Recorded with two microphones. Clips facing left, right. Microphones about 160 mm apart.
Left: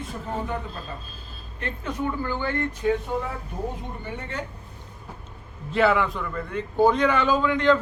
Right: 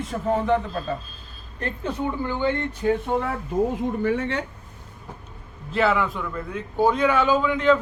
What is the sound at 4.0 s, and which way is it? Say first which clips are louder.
Speech: right 9 dB; 90° right.